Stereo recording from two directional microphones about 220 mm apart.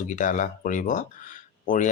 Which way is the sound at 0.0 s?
35° left (ahead or behind).